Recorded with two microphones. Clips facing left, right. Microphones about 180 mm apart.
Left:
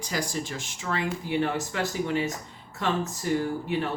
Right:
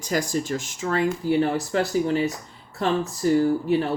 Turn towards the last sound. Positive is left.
turn(degrees=-35)  # may be behind; listen again after turning